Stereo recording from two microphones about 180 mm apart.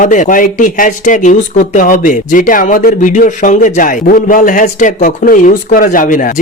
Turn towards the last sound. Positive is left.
turn(degrees=45)  # may be behind; listen again after turning